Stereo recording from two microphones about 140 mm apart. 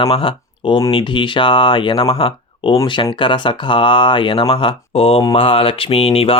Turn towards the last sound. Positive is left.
turn(degrees=40)  # may be behind; listen again after turning